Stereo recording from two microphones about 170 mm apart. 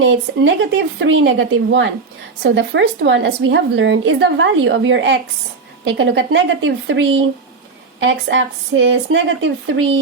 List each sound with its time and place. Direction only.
0.1 s a woman's voice: 90° right